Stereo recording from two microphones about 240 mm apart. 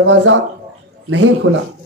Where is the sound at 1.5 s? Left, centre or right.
Right.